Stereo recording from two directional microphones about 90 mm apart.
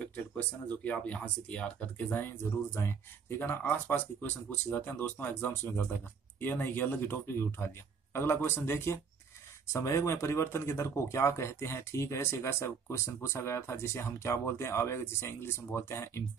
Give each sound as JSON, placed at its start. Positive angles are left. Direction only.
{"t": 0.0, "sound": "speech", "side_deg": 15}